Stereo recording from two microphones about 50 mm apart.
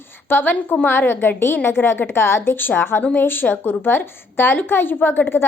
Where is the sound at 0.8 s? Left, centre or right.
Left.